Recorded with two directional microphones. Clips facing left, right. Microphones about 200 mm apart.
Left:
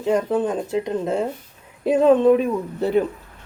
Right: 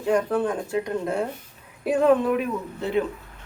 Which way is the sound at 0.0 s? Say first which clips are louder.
Left 2 dB; 20° left (ahead or behind).